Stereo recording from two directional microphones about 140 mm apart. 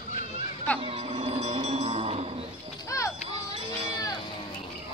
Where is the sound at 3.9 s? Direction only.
25° left (ahead or behind).